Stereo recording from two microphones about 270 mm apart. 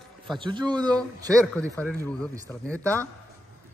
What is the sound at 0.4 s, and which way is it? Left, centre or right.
Speech, centre.